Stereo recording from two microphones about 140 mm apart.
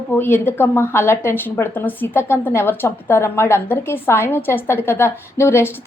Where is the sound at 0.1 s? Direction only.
15° left (ahead or behind).